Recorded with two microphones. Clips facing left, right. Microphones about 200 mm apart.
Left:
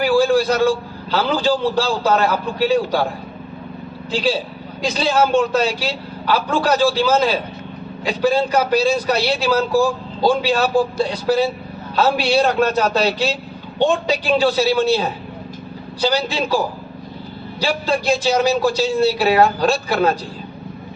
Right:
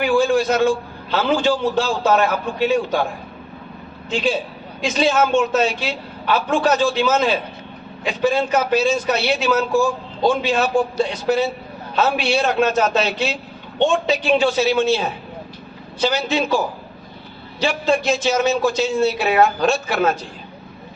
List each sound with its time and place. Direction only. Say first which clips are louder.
0.0 s a man's voice: left 1 dB; 35° left (ahead or behind)
4.1 s a man's voice: left 1 dB; 35° left (ahead or behind)
17.6 s a man's voice: right 1 dB; 35° left (ahead or behind)